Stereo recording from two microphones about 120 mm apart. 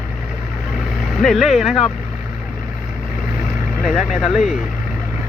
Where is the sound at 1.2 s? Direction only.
Centre (ahead or behind).